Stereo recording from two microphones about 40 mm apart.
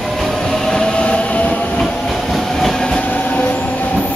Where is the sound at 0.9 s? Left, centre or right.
Left.